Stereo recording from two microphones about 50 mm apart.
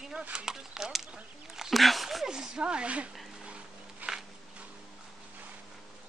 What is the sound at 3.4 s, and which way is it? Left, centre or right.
Dog, right.